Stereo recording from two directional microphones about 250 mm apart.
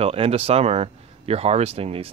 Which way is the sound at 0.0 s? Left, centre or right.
Right.